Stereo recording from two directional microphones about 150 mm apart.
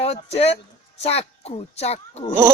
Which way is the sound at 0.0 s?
45° left (ahead or behind).